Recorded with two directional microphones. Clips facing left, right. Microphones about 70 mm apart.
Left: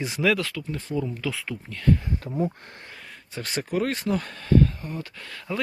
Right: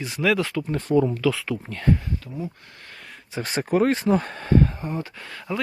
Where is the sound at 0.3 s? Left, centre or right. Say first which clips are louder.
Right 5 dB; right.